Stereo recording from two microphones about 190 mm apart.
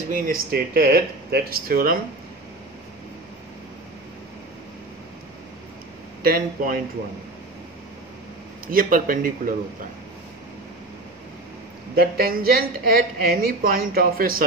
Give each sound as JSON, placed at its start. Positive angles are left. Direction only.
{"t": 0.1, "sound": "a woman's voice", "side_deg": -50}
{"t": 6.2, "sound": "a woman's voice", "side_deg": -50}
{"t": 8.7, "sound": "a woman's voice", "side_deg": -45}
{"t": 11.9, "sound": "a woman's voice", "side_deg": -50}